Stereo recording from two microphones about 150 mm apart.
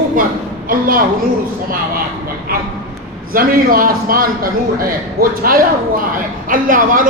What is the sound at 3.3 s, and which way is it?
A man's voice, 70° right (ahead or behind).